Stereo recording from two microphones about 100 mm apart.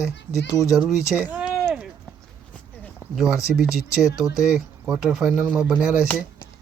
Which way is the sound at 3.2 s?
5° right (ahead or behind).